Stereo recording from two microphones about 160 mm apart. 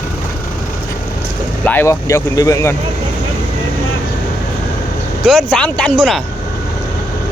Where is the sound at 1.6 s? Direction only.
15° left (ahead or behind).